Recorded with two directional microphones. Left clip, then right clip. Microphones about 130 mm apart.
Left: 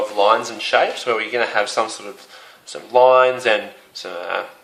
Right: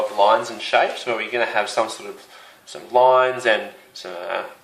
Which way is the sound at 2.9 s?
25° left (ahead or behind).